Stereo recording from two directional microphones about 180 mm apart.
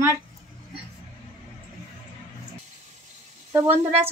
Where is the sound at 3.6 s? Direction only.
35° right (ahead or behind).